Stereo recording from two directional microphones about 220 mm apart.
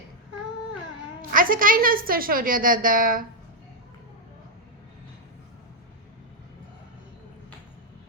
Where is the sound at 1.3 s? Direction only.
40° right (ahead or behind).